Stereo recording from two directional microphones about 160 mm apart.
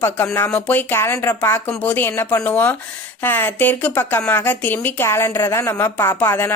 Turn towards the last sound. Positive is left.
turn(degrees=15)  # may be behind; listen again after turning